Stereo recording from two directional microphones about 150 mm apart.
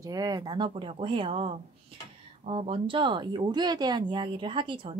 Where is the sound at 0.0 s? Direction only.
25° right (ahead or behind).